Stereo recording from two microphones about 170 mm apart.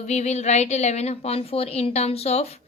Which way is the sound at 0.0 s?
40° left (ahead or behind).